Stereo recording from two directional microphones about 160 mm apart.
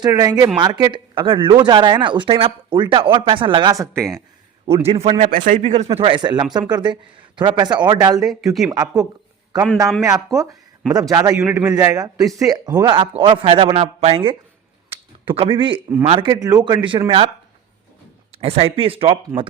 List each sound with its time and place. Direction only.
0.0 s speech: 25° right (ahead or behind)
4.7 s a man's voice: 40° right (ahead or behind)
5.2 s speech: 50° right (ahead or behind); by 8.2 s 25° right (ahead or behind)
8.2 s speech: centre (ahead or behind)
8.7 s speech: 20° right (ahead or behind)
10.3 s speech: 20° right (ahead or behind)
11.3 s a man's voice: 10° right (ahead or behind)
11.6 s a man's voice: 20° right (ahead or behind)
14.8 s a sound: 35° right (ahead or behind)
16.0 s a man's voice: 35° right (ahead or behind)
16.3 s a man's voice: 25° right (ahead or behind)
18.3 s a man's voice: 35° right (ahead or behind)